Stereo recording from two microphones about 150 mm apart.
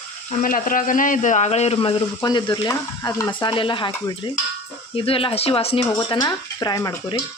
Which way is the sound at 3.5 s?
35° left (ahead or behind).